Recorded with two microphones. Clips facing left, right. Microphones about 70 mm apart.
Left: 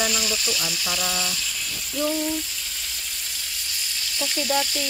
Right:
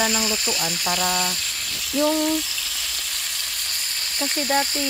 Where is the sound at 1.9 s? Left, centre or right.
Right.